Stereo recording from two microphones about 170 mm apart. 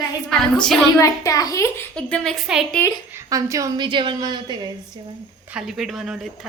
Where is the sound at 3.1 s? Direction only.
20° right (ahead or behind).